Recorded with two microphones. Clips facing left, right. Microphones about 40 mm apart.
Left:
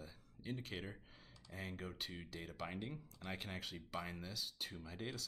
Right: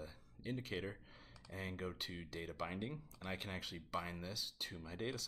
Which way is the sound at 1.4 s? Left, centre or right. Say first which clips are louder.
Right 3 dB; centre.